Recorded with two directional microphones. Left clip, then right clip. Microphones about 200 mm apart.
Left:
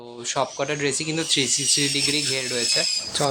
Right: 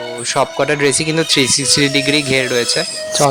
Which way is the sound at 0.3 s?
35° right (ahead or behind).